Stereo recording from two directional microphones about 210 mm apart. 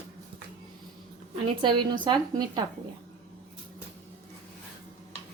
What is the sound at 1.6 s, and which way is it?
A woman's voice, 20° right (ahead or behind).